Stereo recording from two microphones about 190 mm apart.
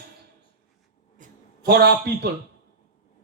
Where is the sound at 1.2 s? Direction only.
55° right (ahead or behind).